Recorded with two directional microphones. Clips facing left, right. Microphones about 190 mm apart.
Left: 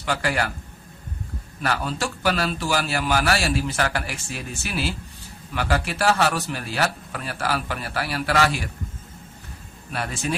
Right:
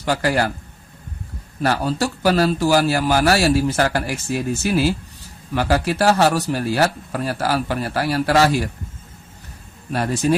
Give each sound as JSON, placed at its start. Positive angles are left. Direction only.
{"t": 0.0, "sound": "speech", "side_deg": -40}
{"t": 1.6, "sound": "speech", "side_deg": -40}
{"t": 9.9, "sound": "speech", "side_deg": -40}